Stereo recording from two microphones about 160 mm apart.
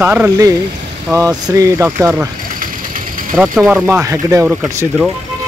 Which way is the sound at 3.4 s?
20° right (ahead or behind).